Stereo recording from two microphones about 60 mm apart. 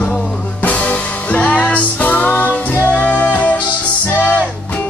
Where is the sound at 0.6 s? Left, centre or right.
Left.